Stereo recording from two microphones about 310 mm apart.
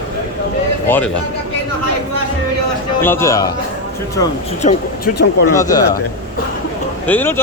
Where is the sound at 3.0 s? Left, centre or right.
Centre.